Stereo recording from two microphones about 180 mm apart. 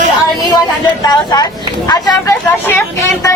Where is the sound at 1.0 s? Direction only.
20° left (ahead or behind).